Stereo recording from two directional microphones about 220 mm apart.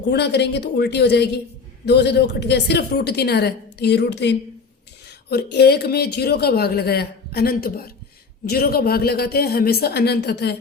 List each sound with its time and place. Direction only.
0.1 s a woman's voice: 50° left (ahead or behind)